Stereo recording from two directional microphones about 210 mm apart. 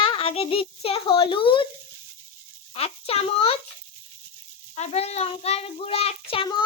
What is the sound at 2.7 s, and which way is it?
Speech, 30° left (ahead or behind).